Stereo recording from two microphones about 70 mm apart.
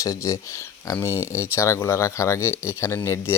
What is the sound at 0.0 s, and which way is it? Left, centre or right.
Speech, left.